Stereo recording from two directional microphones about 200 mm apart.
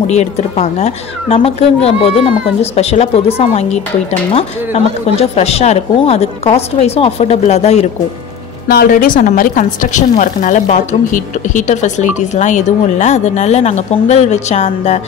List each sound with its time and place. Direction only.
0.0 s a woman's voice: 35° left (ahead or behind)
8.6 s a woman's voice: 45° left (ahead or behind)